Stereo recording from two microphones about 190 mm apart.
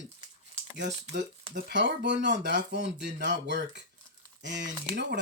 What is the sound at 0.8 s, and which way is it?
Speech, 65° right (ahead or behind).